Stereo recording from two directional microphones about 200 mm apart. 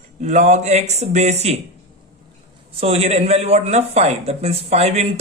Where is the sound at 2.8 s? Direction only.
30° right (ahead or behind).